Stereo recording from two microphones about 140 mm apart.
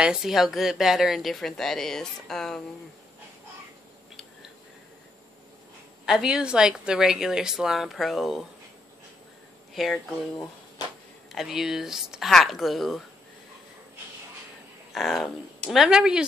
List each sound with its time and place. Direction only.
0.0 s speech: 5° right (ahead or behind)
6.0 s speech: 5° right (ahead or behind)
9.8 s speech: centre (ahead or behind)
11.3 s speech: 5° right (ahead or behind)
14.9 s speech: centre (ahead or behind)